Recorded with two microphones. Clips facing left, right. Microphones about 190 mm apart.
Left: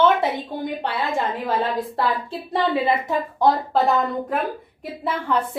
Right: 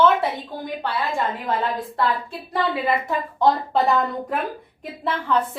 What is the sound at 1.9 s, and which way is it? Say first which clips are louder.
A woman's voice: even; 30° left (ahead or behind).